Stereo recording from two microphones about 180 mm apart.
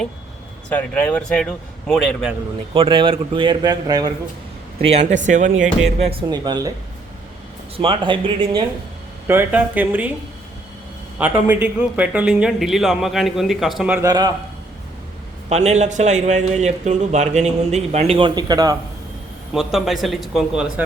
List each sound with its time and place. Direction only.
0.7 s a man's voice: 10° left (ahead or behind)
2.7 s a man's voice: 30° right (ahead or behind)
4.9 s speech: 40° right (ahead or behind)
6.0 s a man's voice: 30° right (ahead or behind)
7.8 s a man's voice: 30° right (ahead or behind)
9.2 s speech: 10° right (ahead or behind)
11.2 s a man's voice: 5° right (ahead or behind)
14.1 s a man's voice: 20° right (ahead or behind)
15.4 s a man's voice: 35° right (ahead or behind); by 18.8 s 20° right (ahead or behind)
19.5 s a man's voice: centre (ahead or behind)